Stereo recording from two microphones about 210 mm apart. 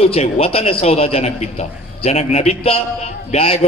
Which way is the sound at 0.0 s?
30° left (ahead or behind).